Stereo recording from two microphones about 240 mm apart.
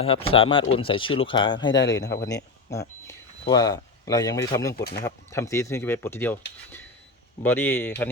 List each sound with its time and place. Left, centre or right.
0.0 s speech: left
1.7 s speech: left
2.2 s speech: centre
4.7 s speech: left
5.0 s speech: centre
7.4 s speech: centre